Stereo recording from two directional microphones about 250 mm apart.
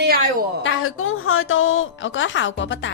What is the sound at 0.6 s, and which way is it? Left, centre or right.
A woman's voice, left.